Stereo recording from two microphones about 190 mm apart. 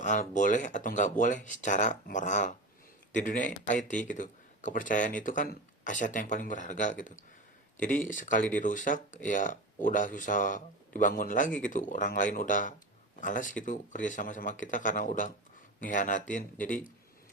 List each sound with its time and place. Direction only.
0.0 s speech: 40° left (ahead or behind)